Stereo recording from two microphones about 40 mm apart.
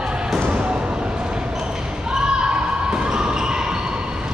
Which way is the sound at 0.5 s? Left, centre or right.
Right.